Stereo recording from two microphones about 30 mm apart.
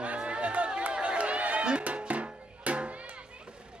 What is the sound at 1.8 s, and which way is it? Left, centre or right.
Music, right.